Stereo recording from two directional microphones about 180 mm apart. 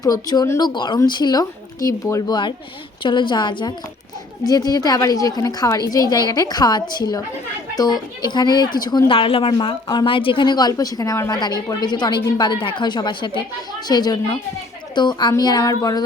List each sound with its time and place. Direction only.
0.0 s speech: 20° left (ahead or behind)
8.2 s speech: 25° left (ahead or behind)